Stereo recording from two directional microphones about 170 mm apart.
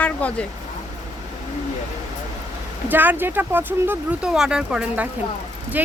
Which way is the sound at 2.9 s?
10° right (ahead or behind).